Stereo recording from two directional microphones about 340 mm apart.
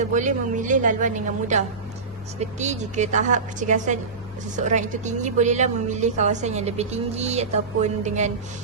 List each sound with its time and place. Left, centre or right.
0.0 s a woman's voice: right